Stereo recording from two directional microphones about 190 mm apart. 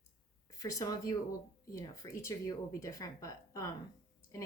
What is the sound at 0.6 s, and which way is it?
Speech, 20° left (ahead or behind).